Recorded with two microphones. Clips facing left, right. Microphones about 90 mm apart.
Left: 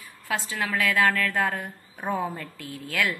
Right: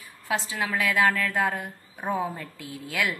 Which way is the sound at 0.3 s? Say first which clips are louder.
Even; 15° right (ahead or behind).